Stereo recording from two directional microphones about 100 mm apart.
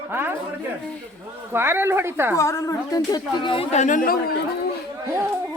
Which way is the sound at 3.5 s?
70° left (ahead or behind).